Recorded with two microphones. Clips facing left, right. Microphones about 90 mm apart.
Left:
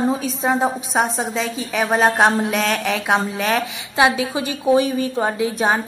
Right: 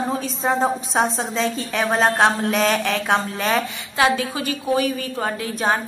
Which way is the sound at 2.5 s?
Centre (ahead or behind).